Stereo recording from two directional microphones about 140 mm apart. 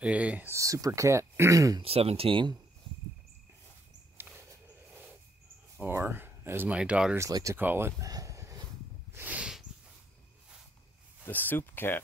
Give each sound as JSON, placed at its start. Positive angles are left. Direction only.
{"t": 0.0, "sound": "speech", "side_deg": -10}
{"t": 0.6, "sound": "speech", "side_deg": -25}
{"t": 1.8, "sound": "speech", "side_deg": -45}
{"t": 4.3, "sound": "a sound", "side_deg": -10}
{"t": 5.8, "sound": "speech", "side_deg": -15}
{"t": 7.2, "sound": "speech", "side_deg": -25}
{"t": 9.1, "sound": "snort", "side_deg": -10}
{"t": 11.2, "sound": "speech", "side_deg": 15}